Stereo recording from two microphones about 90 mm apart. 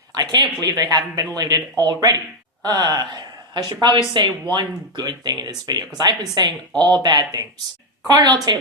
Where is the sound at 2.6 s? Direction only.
45° right (ahead or behind).